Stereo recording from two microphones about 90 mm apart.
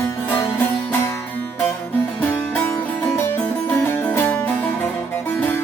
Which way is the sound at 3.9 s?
20° left (ahead or behind).